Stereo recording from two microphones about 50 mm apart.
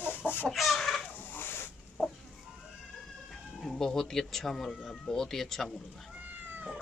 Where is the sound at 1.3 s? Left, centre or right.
Left.